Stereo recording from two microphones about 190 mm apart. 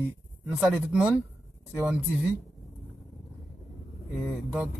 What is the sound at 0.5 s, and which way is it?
Speech, 5° right (ahead or behind).